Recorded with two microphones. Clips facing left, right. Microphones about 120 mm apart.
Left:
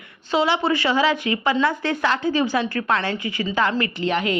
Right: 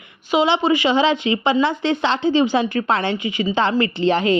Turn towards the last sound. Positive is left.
turn(degrees=-30)  # may be behind; listen again after turning